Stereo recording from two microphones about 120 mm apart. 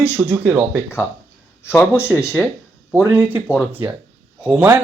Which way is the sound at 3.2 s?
15° right (ahead or behind).